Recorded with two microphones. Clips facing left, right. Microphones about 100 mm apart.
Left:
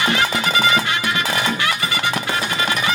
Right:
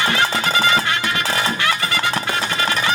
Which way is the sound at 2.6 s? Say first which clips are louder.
Right 1 dB; 35° right (ahead or behind).